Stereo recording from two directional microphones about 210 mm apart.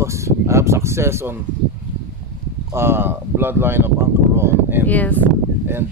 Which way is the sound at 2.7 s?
10° right (ahead or behind).